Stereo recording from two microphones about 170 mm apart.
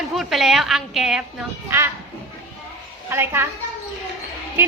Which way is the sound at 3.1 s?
15° right (ahead or behind).